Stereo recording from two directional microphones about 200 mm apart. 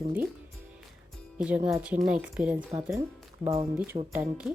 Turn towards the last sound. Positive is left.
turn(degrees=-5)  # may be behind; listen again after turning